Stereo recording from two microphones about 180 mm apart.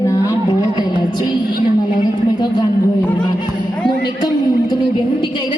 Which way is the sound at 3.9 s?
25° left (ahead or behind).